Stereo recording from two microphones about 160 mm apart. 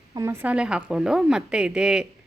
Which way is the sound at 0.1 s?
20° right (ahead or behind).